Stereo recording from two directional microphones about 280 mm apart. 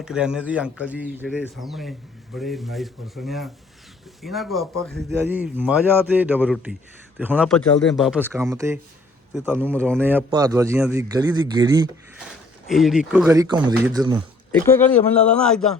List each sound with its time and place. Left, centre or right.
0.0 s a man's voice: centre
12.6 s a man's voice: centre
14.5 s speech: centre